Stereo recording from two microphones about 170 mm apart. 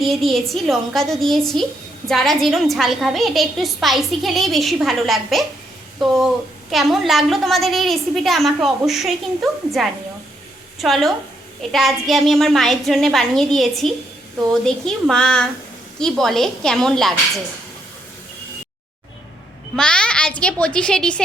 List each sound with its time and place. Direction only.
0.0 s a woman's voice: centre (ahead or behind)
19.7 s a woman's voice: 5° left (ahead or behind)